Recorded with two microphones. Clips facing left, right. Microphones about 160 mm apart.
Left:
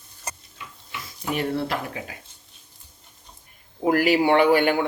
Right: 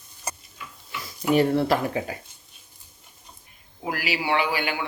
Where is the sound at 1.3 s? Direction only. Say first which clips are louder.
Right 6 dB; 35° right (ahead or behind).